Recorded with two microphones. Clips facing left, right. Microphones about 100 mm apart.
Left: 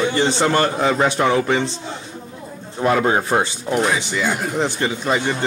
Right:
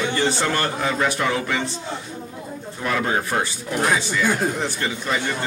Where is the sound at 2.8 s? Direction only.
30° left (ahead or behind).